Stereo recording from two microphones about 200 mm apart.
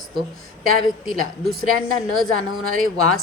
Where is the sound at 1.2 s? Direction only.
50° right (ahead or behind).